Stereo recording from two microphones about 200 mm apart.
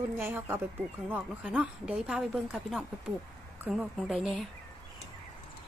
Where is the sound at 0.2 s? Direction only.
10° right (ahead or behind).